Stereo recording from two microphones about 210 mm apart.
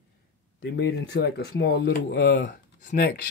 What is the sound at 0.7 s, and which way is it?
Speech, 55° left (ahead or behind).